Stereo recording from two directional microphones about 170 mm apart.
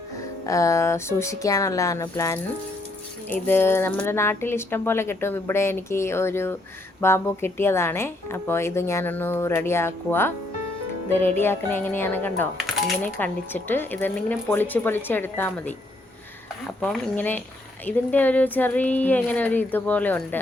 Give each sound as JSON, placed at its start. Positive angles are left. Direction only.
{"t": 0.4, "sound": "speech", "side_deg": 20}
{"t": 16.8, "sound": "speech", "side_deg": 10}